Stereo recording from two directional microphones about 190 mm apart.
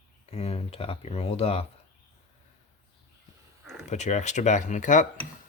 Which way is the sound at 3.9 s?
35° left (ahead or behind).